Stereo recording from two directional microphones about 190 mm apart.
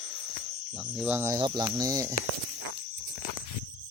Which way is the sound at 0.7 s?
5° right (ahead or behind).